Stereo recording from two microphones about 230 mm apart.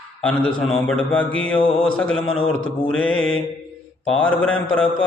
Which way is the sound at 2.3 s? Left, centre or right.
Left.